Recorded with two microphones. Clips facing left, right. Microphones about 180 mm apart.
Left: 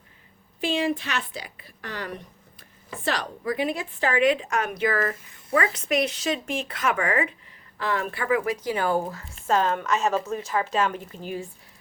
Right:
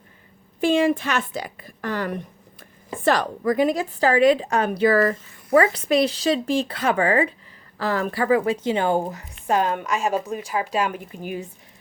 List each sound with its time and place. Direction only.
0.6 s a woman's voice: 50° right (ahead or behind); by 8.5 s 35° right (ahead or behind)
8.6 s speech: 25° right (ahead or behind)